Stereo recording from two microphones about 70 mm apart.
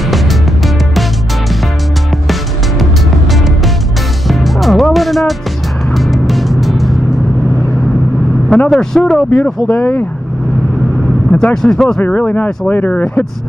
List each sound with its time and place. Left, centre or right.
4.3 s music: centre
8.6 s speech: centre
11.3 s speech: centre
12.0 s speech: left